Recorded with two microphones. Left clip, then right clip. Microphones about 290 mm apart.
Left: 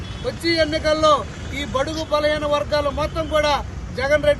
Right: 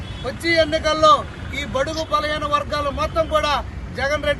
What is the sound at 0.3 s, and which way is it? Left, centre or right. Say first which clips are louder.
A man's voice: right 2 dB; centre.